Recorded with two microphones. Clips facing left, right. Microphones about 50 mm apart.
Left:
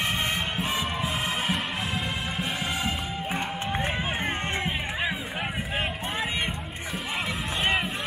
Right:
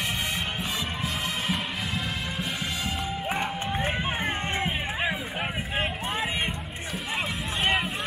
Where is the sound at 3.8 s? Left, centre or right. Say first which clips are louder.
Right 2 dB; centre.